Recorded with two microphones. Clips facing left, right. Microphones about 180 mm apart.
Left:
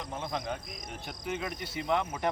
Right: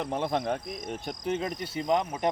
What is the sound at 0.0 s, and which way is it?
Cricket, 65° right (ahead or behind).